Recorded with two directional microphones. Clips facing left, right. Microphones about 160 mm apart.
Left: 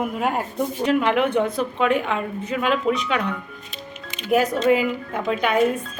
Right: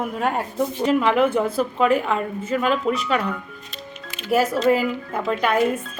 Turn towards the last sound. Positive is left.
turn(degrees=0)  # may be behind; listen again after turning